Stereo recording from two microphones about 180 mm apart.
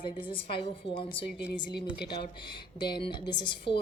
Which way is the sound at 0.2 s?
30° left (ahead or behind).